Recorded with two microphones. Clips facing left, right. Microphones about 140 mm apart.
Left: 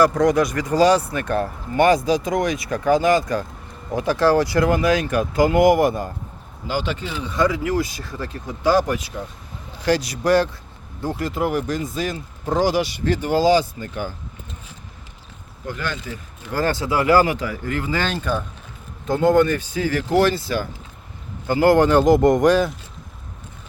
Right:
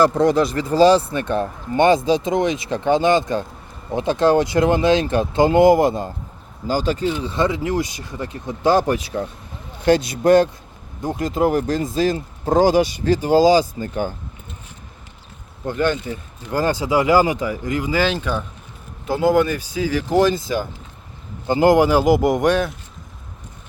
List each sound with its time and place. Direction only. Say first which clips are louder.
0.0 s speech: right 1 dB; 30° right (ahead or behind)
6.7 s speech: right 5 dB; 40° right (ahead or behind); by 11.5 s 20° right (ahead or behind)
11.5 s speech: right 4 dB; 40° right (ahead or behind)
13.0 s speech: right 3 dB; 25° right (ahead or behind)
15.6 s speech: right 8 dB; 25° right (ahead or behind); by 22.7 s centre (ahead or behind)